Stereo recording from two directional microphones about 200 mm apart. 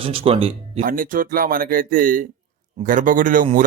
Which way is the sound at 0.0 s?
25° right (ahead or behind).